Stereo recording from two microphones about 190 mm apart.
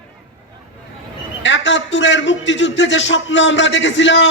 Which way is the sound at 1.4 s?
70° left (ahead or behind).